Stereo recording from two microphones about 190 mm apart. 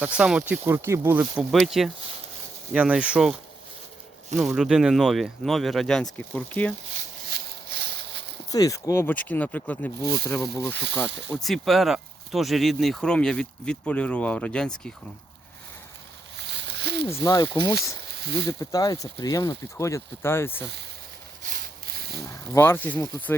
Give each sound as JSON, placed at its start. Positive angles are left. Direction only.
{"t": 0.0, "sound": "speech", "side_deg": -5}
{"t": 4.4, "sound": "speech", "side_deg": 0}
{"t": 8.4, "sound": "speech", "side_deg": 20}
{"t": 10.5, "sound": "speech", "side_deg": 15}
{"t": 11.4, "sound": "speech", "side_deg": 0}
{"t": 16.4, "sound": "a sound", "side_deg": -65}
{"t": 17.1, "sound": "speech", "side_deg": 15}
{"t": 18.2, "sound": "speech", "side_deg": -60}
{"t": 18.6, "sound": "speech", "side_deg": 20}
{"t": 21.5, "sound": "a sound", "side_deg": -55}
{"t": 22.3, "sound": "speech", "side_deg": 15}